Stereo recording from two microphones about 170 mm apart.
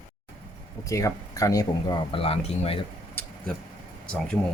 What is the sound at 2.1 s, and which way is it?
Speech, 35° left (ahead or behind).